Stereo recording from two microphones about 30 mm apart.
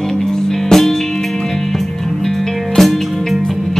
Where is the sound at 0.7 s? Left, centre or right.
Centre.